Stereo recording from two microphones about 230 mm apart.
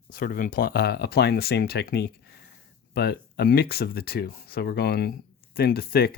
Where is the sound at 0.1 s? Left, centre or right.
Left.